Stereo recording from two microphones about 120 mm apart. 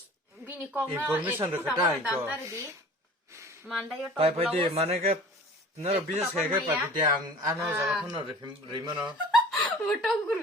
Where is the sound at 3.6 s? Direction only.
Centre (ahead or behind).